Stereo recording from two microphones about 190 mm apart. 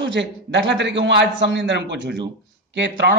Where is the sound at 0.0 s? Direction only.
70° right (ahead or behind).